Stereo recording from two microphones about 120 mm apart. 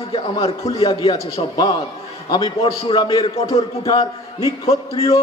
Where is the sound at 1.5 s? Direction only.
35° left (ahead or behind).